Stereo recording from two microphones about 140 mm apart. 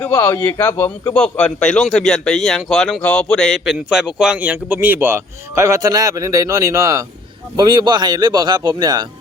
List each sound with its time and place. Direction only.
0.0 s a man's voice: 20° left (ahead or behind); by 9.0 s 30° right (ahead or behind)